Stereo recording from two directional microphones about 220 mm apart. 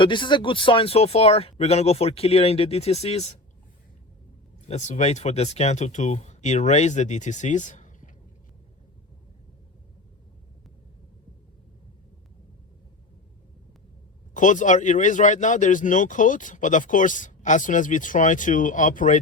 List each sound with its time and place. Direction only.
0.0 s speech: 20° left (ahead or behind)
4.7 s speech: 30° left (ahead or behind)
14.3 s speech: 35° left (ahead or behind)